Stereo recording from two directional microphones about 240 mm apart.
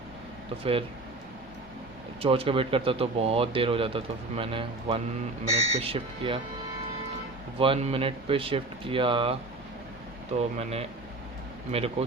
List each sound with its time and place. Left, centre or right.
0.6 s speech: right
2.2 s speech: right
7.6 s speech: right
10.6 s speech: right